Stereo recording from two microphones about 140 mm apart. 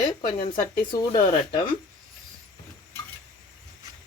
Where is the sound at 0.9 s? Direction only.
30° left (ahead or behind).